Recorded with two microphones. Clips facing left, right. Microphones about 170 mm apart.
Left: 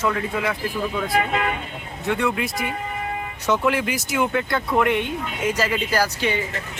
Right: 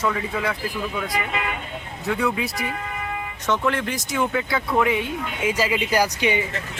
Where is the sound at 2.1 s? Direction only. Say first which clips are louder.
Left 1 dB; centre (ahead or behind).